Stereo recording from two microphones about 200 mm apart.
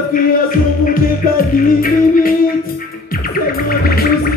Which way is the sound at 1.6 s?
45° left (ahead or behind).